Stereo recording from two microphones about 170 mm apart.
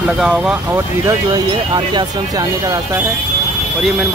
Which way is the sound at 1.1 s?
25° right (ahead or behind).